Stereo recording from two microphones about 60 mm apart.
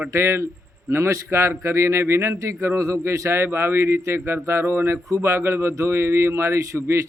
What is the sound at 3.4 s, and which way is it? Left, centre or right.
A man's voice, right.